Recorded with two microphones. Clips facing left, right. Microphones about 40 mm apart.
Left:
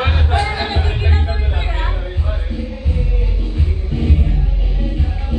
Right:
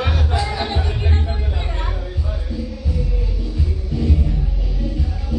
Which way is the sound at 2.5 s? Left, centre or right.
Left.